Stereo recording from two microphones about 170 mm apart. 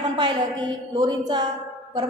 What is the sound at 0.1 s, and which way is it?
A woman's voice, 25° right (ahead or behind).